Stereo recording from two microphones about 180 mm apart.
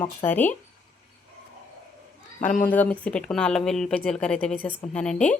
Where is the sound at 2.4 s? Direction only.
45° left (ahead or behind).